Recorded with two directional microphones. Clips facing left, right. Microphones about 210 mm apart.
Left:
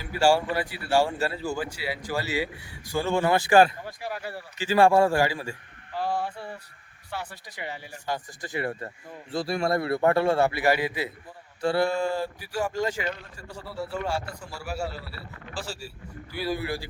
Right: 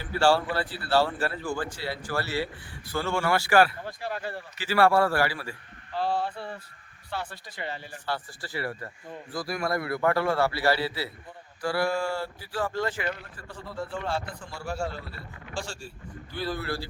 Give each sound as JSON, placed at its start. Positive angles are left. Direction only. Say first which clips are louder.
{"t": 0.0, "sound": "a man's voice", "louder": "left 1 dB", "side_deg": 10}